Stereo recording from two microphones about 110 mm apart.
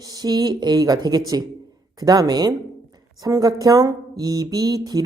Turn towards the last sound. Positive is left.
turn(degrees=-35)  # may be behind; listen again after turning